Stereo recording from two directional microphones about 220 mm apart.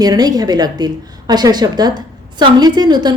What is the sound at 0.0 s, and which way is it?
A woman's voice, 15° right (ahead or behind).